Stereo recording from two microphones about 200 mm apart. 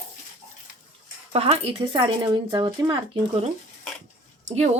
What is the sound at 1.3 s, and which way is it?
Speech, 30° right (ahead or behind).